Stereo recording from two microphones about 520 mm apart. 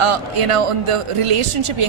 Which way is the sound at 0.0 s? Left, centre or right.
Right.